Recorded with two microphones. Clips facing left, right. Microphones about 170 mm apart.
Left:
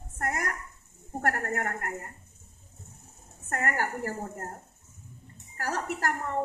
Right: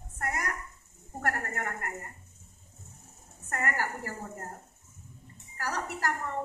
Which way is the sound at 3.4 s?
50° left (ahead or behind).